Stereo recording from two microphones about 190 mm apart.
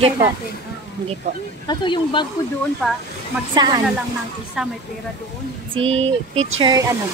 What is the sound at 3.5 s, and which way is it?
Speech, 20° right (ahead or behind).